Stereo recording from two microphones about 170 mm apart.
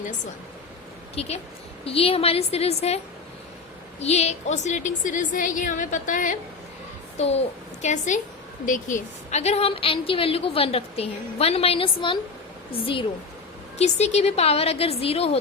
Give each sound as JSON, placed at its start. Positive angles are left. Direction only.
{"t": 1.1, "sound": "a woman's voice", "side_deg": 35}
{"t": 4.0, "sound": "a woman's voice", "side_deg": 40}
{"t": 7.2, "sound": "a woman's voice", "side_deg": 40}